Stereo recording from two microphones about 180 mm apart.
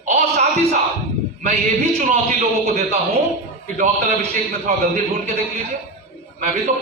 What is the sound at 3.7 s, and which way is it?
A man's voice, 40° right (ahead or behind).